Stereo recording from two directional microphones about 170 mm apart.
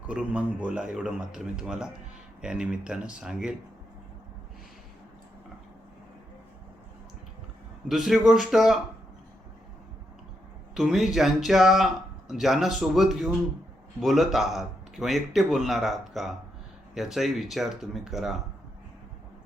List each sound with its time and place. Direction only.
0.1 s speech: 5° right (ahead or behind)
7.9 s speech: centre (ahead or behind)
10.8 s speech: centre (ahead or behind)